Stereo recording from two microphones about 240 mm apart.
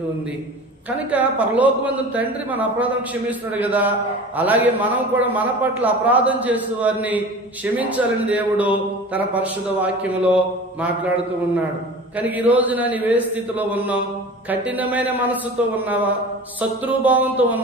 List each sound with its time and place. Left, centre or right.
0.9 s a man's voice: centre
12.1 s a man's voice: centre